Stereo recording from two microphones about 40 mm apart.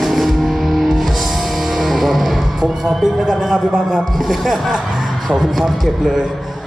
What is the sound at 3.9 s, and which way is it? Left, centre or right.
Speech, centre.